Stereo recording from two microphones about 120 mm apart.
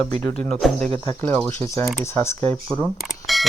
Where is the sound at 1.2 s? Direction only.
15° left (ahead or behind).